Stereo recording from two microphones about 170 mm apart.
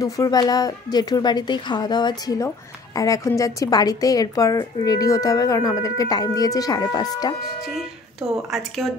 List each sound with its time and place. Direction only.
0.0 s speech: 20° left (ahead or behind)
7.6 s speech: centre (ahead or behind)